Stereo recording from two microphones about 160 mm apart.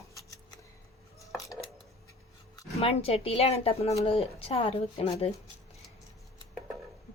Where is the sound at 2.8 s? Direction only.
35° left (ahead or behind).